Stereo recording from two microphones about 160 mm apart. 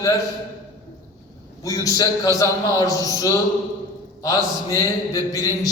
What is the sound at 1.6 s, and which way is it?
A man's voice, 20° left (ahead or behind).